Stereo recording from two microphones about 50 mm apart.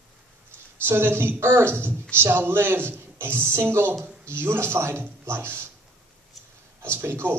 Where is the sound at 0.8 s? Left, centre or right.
Right.